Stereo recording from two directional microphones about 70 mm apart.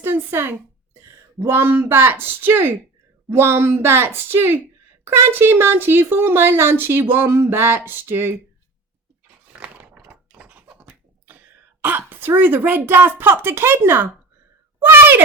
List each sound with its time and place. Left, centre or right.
0.0 s speech: right
9.6 s a sound: right
14.8 s speech: right